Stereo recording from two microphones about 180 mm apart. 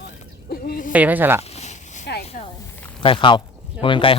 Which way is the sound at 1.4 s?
40° left (ahead or behind).